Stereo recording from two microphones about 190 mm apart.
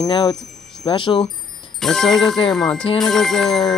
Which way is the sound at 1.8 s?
Centre (ahead or behind).